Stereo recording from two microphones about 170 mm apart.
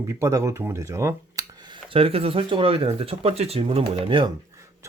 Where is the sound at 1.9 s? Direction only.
35° right (ahead or behind).